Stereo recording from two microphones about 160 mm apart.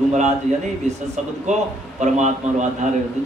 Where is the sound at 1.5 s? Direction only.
45° right (ahead or behind).